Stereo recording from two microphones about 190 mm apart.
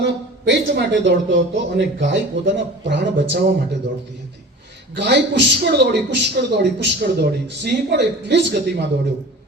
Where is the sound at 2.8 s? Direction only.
65° right (ahead or behind).